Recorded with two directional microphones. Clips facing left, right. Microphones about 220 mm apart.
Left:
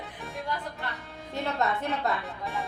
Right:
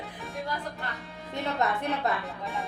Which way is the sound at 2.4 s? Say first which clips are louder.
Even; centre (ahead or behind).